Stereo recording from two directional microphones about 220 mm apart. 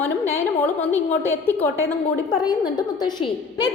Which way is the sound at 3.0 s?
20° left (ahead or behind).